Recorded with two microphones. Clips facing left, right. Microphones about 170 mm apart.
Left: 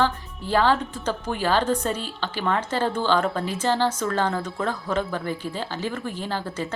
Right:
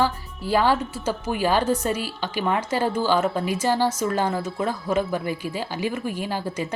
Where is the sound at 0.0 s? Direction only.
10° right (ahead or behind).